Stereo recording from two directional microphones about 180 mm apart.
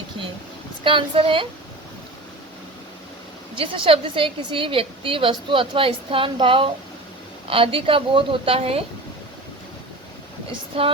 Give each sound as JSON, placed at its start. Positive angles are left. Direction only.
{"t": 0.9, "sound": "a woman's voice", "side_deg": -30}
{"t": 3.5, "sound": "a woman's voice", "side_deg": -30}
{"t": 10.7, "sound": "a woman's voice", "side_deg": -30}